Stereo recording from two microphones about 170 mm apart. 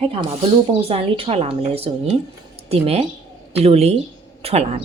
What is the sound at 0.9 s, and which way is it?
A woman's voice, 35° right (ahead or behind).